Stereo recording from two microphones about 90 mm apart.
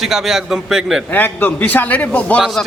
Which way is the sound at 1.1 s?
20° left (ahead or behind).